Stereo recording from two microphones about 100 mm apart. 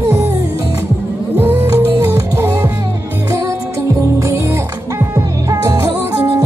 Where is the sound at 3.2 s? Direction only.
35° right (ahead or behind).